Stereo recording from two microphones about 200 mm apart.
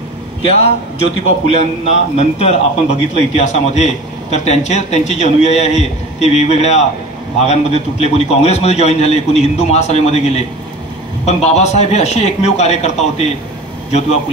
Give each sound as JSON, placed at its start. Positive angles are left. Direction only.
{"t": 0.4, "sound": "a man's voice", "side_deg": 30}